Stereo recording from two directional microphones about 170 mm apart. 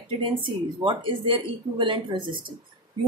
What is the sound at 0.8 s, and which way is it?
Speech, 30° right (ahead or behind).